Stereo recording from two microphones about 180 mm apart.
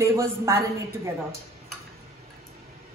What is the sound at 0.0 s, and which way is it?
Speech, 15° right (ahead or behind).